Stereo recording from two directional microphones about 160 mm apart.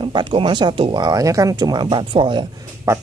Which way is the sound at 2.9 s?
15° right (ahead or behind).